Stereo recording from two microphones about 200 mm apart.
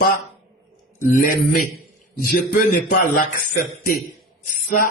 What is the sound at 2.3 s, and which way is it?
Speech, 45° left (ahead or behind).